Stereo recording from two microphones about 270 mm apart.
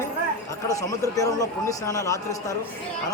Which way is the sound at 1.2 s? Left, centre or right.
Centre.